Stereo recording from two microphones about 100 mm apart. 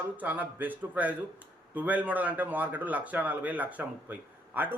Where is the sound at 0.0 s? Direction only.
15° right (ahead or behind).